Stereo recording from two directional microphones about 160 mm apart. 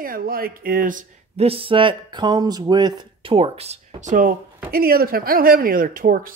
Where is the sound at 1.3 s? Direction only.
40° right (ahead or behind); by 4.4 s 55° right (ahead or behind).